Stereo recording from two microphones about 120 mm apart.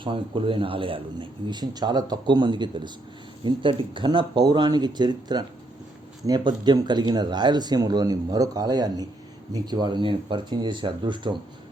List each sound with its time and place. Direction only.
0.0 s a man's voice: 45° right (ahead or behind)